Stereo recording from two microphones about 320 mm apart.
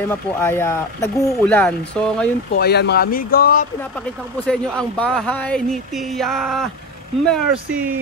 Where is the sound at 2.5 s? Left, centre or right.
Left.